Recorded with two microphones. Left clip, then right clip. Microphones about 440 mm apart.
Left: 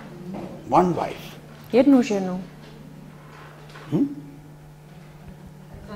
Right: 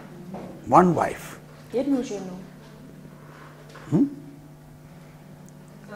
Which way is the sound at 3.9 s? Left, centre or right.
Right.